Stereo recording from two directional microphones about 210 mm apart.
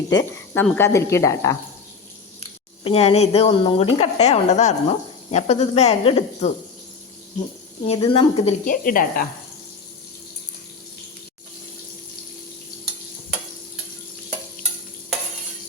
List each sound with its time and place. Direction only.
0.1 s a woman's voice: 10° left (ahead or behind)
2.8 s a woman's voice: 25° left (ahead or behind)
7.9 s speech: 25° left (ahead or behind)
8.6 s speech: 40° left (ahead or behind)